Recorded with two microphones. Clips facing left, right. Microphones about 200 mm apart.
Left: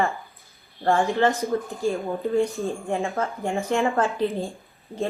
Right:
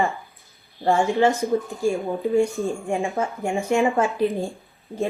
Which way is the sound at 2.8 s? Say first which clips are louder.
Right 2 dB; 15° right (ahead or behind).